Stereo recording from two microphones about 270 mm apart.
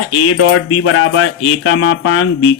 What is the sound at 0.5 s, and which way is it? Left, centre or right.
Speech, left.